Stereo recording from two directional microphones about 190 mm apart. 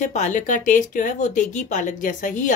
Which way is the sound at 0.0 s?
40° left (ahead or behind).